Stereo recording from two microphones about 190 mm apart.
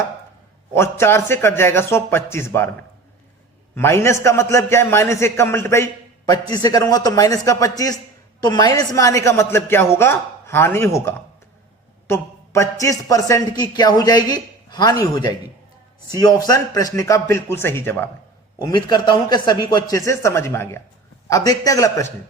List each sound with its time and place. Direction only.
0.7 s a man's voice: 15° left (ahead or behind)
3.8 s a man's voice: 15° left (ahead or behind)
12.0 s a sound: 15° left (ahead or behind)
12.8 s a man's voice: 15° left (ahead or behind)
18.6 s a man's voice: 20° left (ahead or behind)